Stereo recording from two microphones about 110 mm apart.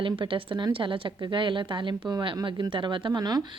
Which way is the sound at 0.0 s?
50° right (ahead or behind).